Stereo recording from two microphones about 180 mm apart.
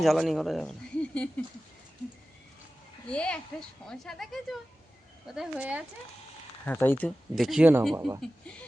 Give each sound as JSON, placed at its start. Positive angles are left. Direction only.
{"t": 0.0, "sound": "speech", "side_deg": 0}
{"t": 3.1, "sound": "speech", "side_deg": 5}
{"t": 6.7, "sound": "speech", "side_deg": 10}